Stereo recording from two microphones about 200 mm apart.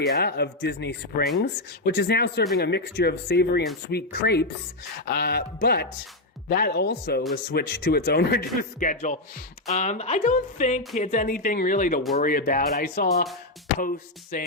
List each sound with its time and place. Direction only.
0.0 s speech: 55° left (ahead or behind)